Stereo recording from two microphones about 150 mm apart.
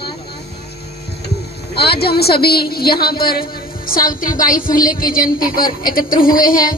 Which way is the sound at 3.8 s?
75° left (ahead or behind).